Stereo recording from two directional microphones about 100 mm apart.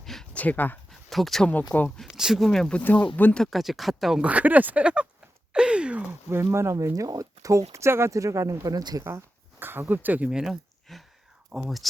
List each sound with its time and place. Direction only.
0.0 s a sound: 5° left (ahead or behind)
0.3 s speech: 15° left (ahead or behind)
0.9 s a sound: centre (ahead or behind)
2.0 s speech: centre (ahead or behind); by 3.4 s 15° left (ahead or behind)
3.4 s speech: centre (ahead or behind)
4.3 s speech: 15° right (ahead or behind)
6.4 s speech: 30° right (ahead or behind)
9.0 s a sound: 25° right (ahead or behind)
9.9 s speech: 20° right (ahead or behind)